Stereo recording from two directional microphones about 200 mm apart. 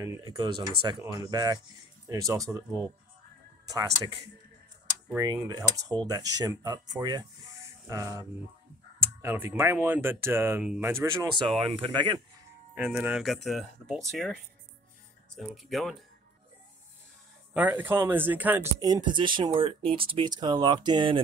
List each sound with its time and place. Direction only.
0.0 s speech: 15° right (ahead or behind)
5.1 s speech: 15° right (ahead or behind)
11.4 s speech: 25° right (ahead or behind)
12.7 s speech: 5° right (ahead or behind)
17.6 s speech: 10° right (ahead or behind)